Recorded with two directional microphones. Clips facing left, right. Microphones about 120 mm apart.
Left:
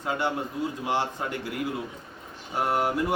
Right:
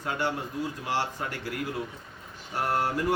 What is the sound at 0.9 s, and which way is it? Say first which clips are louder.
Speech: left 3 dB; 20° left (ahead or behind).